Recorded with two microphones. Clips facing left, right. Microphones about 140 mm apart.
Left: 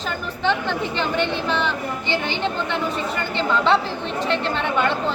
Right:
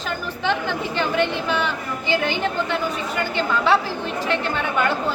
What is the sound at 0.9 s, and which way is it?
A man's voice, 5° right (ahead or behind).